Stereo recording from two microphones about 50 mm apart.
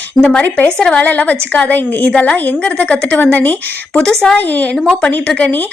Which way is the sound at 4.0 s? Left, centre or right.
Centre.